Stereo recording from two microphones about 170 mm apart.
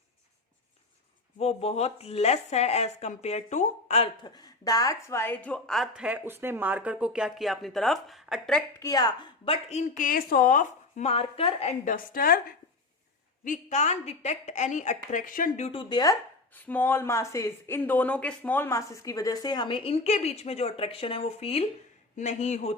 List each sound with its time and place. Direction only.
1.4 s a woman's voice: 40° left (ahead or behind)
4.4 s speech: 20° left (ahead or behind); by 8.6 s centre (ahead or behind)
8.8 s a woman's voice: 20° left (ahead or behind); by 11.9 s 40° left (ahead or behind)
11.9 s a woman's voice: 55° left (ahead or behind)
13.4 s a woman's voice: 45° left (ahead or behind); by 16.1 s 25° left (ahead or behind)
16.6 s a woman's voice: 10° left (ahead or behind); by 22.7 s 40° left (ahead or behind)